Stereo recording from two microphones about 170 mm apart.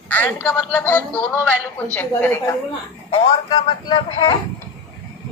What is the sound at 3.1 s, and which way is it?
A man's voice, 25° left (ahead or behind).